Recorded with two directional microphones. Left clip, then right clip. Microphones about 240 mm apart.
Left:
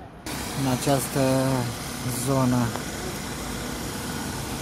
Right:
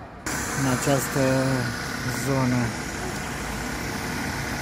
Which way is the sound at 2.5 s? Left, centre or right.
Left.